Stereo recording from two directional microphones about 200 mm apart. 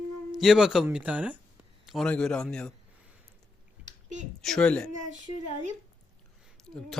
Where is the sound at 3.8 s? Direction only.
35° right (ahead or behind).